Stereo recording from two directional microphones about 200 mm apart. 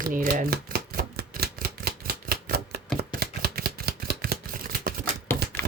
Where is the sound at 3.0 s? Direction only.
50° right (ahead or behind).